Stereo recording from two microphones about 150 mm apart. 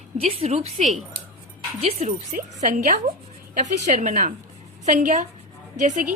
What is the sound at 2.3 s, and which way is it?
Speech, 65° right (ahead or behind).